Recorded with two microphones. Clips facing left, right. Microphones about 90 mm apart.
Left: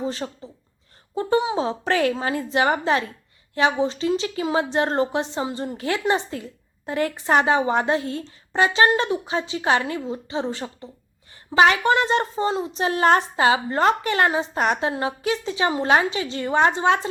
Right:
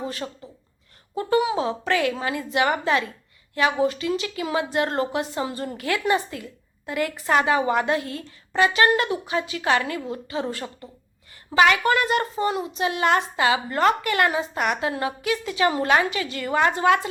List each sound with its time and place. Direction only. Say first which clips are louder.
0.0 s a woman's voice: left 3 dB; 30° left (ahead or behind)